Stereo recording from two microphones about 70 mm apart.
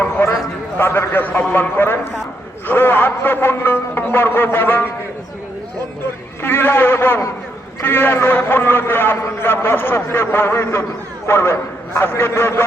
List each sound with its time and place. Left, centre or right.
0.0 s a sound: left
0.8 s a man's voice: left
6.4 s a man's voice: left